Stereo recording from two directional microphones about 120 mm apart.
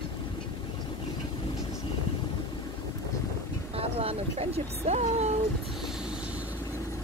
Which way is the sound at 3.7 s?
55° right (ahead or behind).